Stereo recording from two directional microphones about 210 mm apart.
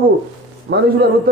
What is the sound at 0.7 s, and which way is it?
Speech, 50° right (ahead or behind).